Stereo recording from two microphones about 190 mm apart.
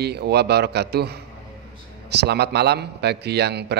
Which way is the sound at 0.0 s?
60° right (ahead or behind).